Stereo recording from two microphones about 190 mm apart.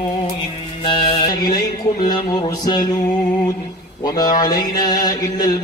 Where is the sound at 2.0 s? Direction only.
20° left (ahead or behind).